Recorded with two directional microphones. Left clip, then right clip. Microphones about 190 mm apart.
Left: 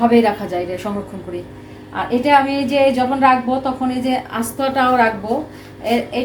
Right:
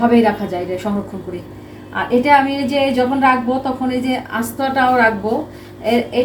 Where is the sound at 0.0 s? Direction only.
25° left (ahead or behind).